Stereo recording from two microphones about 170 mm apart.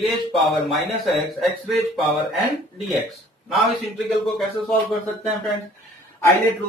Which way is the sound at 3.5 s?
Centre (ahead or behind).